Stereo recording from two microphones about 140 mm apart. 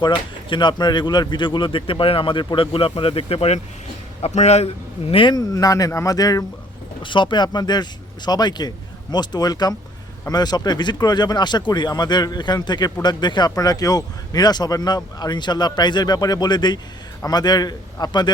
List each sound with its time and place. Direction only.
0.0 s speech: 35° left (ahead or behind)